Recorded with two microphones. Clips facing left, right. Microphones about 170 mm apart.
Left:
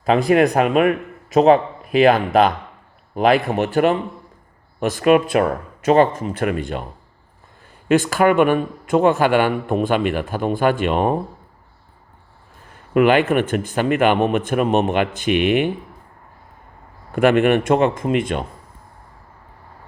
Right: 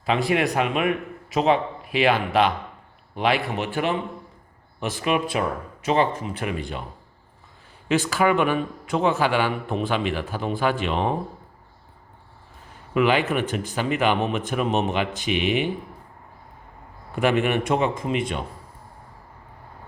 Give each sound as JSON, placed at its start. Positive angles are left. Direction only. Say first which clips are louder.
{"t": 0.0, "sound": "a man's voice", "louder": "left 7 dB", "side_deg": 45}
{"t": 7.9, "sound": "a man's voice", "louder": "left 5 dB", "side_deg": 55}
{"t": 12.9, "sound": "a man's voice", "louder": "left 6 dB", "side_deg": 50}
{"t": 17.2, "sound": "a man's voice", "louder": "left 6 dB", "side_deg": 55}